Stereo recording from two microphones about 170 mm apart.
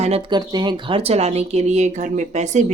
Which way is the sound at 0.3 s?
25° right (ahead or behind).